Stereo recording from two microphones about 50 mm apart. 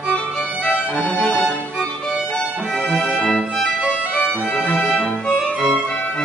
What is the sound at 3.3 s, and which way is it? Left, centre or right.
Music, centre.